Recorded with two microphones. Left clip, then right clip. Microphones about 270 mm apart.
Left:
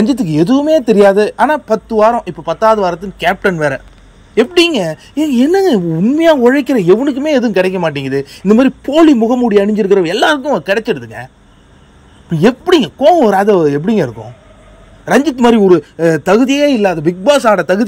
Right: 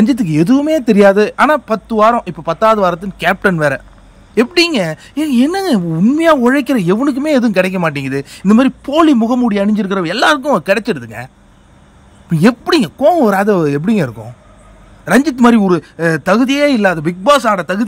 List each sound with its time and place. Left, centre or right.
0.0 s a woman's voice: centre
2.0 s a woman's voice: centre
12.3 s a woman's voice: centre